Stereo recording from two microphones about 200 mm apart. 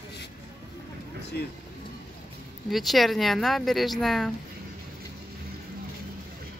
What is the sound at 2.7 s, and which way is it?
Speech, centre (ahead or behind).